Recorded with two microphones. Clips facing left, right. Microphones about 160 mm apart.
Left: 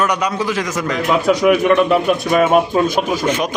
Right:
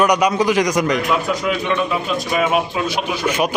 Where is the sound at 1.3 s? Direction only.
70° left (ahead or behind).